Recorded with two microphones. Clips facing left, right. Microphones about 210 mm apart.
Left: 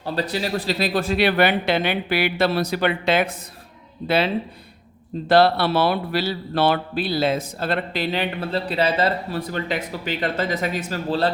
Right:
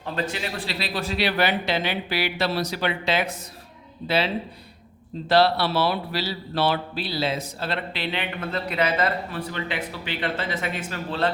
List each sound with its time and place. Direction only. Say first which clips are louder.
0.0 s speech: left 4 dB; 35° left (ahead or behind); by 4.3 s 55° left (ahead or behind)
5.3 s speech: left 3 dB; 50° left (ahead or behind); by 11.3 s 35° left (ahead or behind)